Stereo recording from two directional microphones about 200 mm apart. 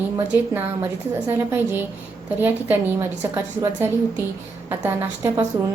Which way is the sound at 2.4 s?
10° right (ahead or behind).